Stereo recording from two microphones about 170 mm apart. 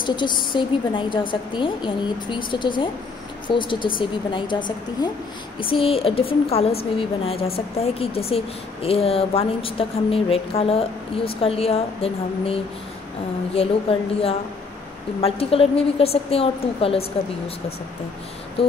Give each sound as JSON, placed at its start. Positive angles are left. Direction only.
{"t": 0.0, "sound": "a woman's voice", "side_deg": 25}
{"t": 13.6, "sound": "a woman's voice", "side_deg": 35}